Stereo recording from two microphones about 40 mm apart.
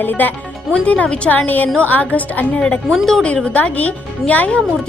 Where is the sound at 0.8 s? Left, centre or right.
Left.